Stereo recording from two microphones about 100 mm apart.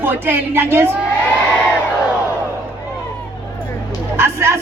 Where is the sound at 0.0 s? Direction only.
20° right (ahead or behind).